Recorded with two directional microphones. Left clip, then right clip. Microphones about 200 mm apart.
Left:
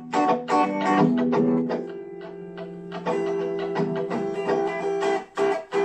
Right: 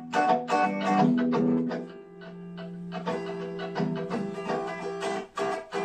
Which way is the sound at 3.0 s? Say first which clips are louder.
Left 8 dB; 40° left (ahead or behind).